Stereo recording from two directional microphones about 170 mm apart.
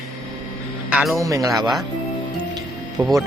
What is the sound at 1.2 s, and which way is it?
Speech, 20° right (ahead or behind).